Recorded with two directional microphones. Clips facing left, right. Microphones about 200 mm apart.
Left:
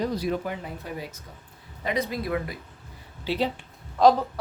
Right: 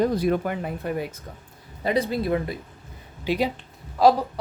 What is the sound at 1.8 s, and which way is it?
Speech, 30° right (ahead or behind).